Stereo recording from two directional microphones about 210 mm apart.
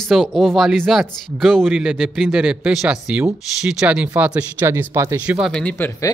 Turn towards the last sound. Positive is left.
turn(degrees=10)  # may be behind; listen again after turning